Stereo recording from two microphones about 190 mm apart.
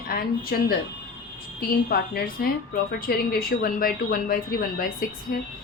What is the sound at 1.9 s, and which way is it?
A woman's voice, 55° left (ahead or behind).